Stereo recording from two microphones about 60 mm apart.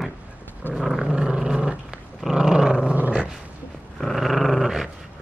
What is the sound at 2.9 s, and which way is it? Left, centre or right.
Dog, right.